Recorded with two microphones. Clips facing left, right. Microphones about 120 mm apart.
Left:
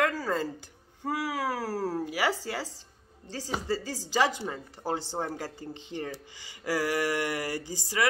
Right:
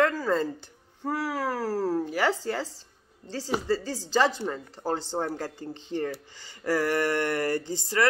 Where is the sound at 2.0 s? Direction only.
10° left (ahead or behind).